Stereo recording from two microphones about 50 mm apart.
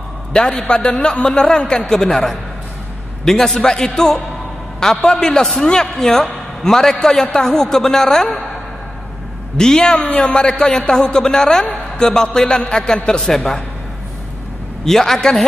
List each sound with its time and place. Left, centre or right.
0.3 s a man's voice: centre
9.6 s a man's voice: centre
9.9 s a man's voice: left
13.2 s a man's voice: centre
14.9 s a man's voice: centre